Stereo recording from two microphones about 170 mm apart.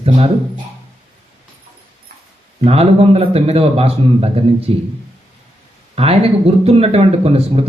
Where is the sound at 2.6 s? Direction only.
35° right (ahead or behind).